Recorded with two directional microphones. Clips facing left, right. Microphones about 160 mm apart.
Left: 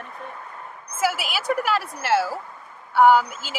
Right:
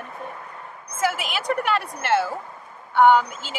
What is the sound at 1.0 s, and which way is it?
Speech, 5° left (ahead or behind).